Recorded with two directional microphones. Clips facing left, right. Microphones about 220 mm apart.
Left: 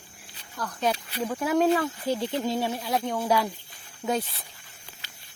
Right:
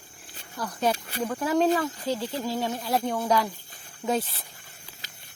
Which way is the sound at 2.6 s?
10° left (ahead or behind).